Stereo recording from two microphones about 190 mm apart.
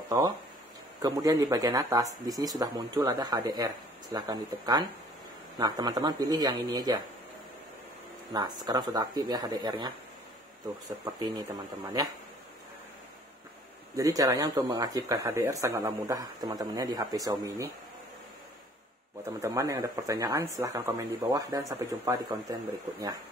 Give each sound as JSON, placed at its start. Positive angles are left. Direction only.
{"t": 1.0, "sound": "speech", "side_deg": -20}
{"t": 8.3, "sound": "speech", "side_deg": -20}
{"t": 11.1, "sound": "speech", "side_deg": -20}
{"t": 13.9, "sound": "speech", "side_deg": -20}
{"t": 19.4, "sound": "speech", "side_deg": -15}